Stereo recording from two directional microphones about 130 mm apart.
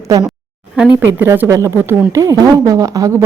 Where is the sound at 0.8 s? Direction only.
15° right (ahead or behind).